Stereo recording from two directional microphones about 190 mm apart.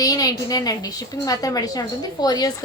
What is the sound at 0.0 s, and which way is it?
A woman's voice, 20° left (ahead or behind).